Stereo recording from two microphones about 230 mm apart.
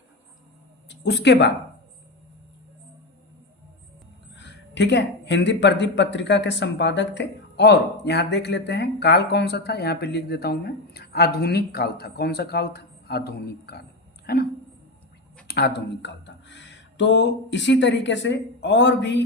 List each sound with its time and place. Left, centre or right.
0.9 s speech: left
4.4 s speech: left
15.4 s speech: left